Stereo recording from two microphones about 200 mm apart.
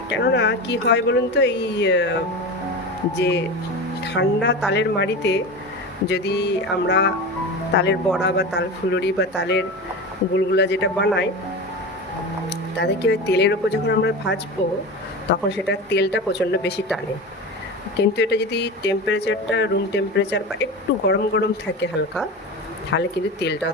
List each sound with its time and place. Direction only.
0.2 s speech: 55° left (ahead or behind)
3.2 s speech: 60° left (ahead or behind)
12.5 s speech: 55° left (ahead or behind)
18.0 s speech: 60° left (ahead or behind)
22.9 s speech: 60° left (ahead or behind)